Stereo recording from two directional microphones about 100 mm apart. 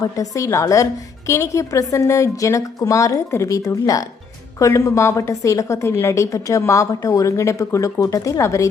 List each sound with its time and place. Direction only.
0.0 s a woman's voice: 35° left (ahead or behind)